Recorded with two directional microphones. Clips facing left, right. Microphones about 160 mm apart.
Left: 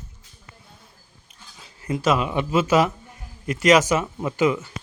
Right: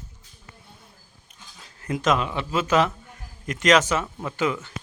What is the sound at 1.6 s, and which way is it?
Speech, 5° left (ahead or behind).